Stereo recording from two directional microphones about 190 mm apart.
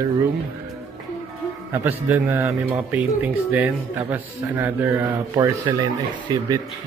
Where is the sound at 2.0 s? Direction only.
10° right (ahead or behind).